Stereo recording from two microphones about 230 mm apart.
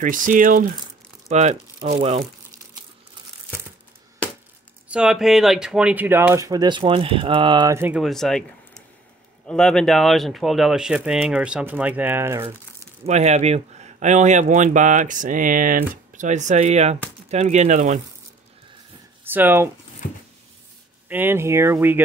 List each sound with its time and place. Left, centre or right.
0.0 s speech: right
4.2 s a sound: centre
4.8 s speech: centre
13.0 s speech: right
19.2 s speech: centre
20.0 s a sound: left
21.1 s speech: centre